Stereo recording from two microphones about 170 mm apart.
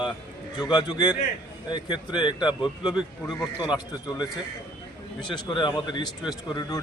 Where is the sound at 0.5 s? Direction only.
25° left (ahead or behind).